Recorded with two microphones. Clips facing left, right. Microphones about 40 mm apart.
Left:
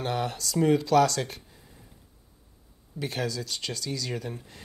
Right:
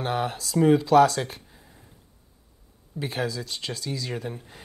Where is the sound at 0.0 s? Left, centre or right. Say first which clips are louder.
Right 2 dB; centre.